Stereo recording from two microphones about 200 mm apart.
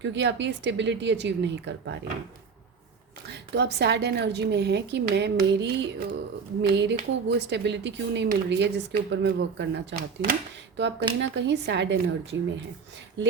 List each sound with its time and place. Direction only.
0.0 s speech: 60° right (ahead or behind)
3.2 s speech: 60° right (ahead or behind)
11.2 s speech: 65° right (ahead or behind)